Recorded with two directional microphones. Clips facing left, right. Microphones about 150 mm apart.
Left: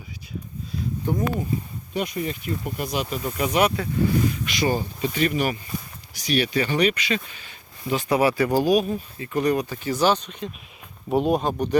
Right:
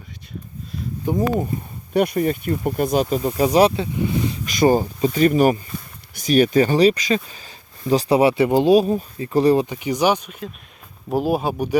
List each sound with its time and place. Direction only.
1.0 s speech: 20° right (ahead or behind)
1.9 s speech: 55° right (ahead or behind); by 3.8 s 30° right (ahead or behind)
4.4 s speech: 45° right (ahead or behind)
9.6 s speech: 15° right (ahead or behind)